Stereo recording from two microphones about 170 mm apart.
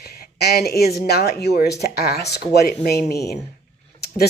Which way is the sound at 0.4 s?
70° left (ahead or behind).